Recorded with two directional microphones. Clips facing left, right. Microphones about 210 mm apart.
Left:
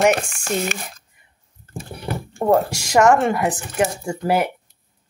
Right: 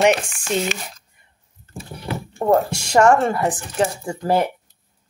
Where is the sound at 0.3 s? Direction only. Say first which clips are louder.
Right 1 dB; 50° left (ahead or behind).